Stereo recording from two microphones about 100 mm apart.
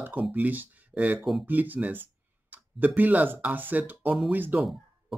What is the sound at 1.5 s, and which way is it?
Speech, 20° right (ahead or behind).